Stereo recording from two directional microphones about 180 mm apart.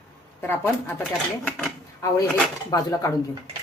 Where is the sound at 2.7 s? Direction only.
20° left (ahead or behind).